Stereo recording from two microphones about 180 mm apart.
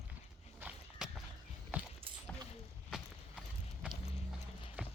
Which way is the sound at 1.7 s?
10° right (ahead or behind).